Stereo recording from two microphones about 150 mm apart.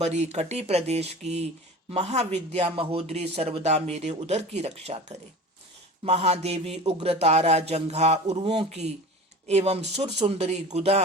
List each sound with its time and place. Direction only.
0.0 s speech: 50° right (ahead or behind)